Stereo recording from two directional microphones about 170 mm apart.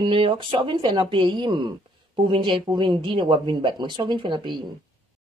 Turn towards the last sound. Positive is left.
turn(degrees=-25)  # may be behind; listen again after turning